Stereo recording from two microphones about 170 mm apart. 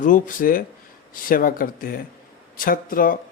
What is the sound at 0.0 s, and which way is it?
Speech, 50° left (ahead or behind).